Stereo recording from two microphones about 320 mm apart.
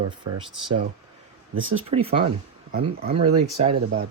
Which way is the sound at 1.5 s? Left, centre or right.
Right.